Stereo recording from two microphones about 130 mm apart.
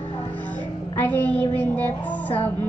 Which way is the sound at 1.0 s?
10° left (ahead or behind).